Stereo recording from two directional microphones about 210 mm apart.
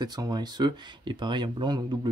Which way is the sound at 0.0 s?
20° right (ahead or behind).